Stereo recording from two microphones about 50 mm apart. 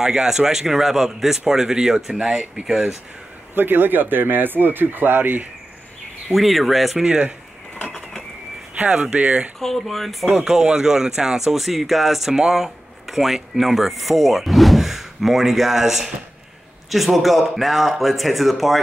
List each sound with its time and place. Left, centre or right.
0.0 s a man's voice: centre
3.5 s speech: right
6.3 s speech: centre
7.1 s a man's voice: centre
8.7 s speech: right
9.6 s speech: centre
10.2 s speech: centre